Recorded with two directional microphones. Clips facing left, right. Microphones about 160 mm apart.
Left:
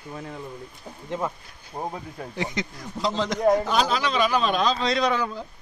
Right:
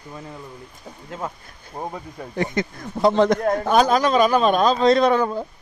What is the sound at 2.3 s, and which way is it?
A man's voice, 50° right (ahead or behind).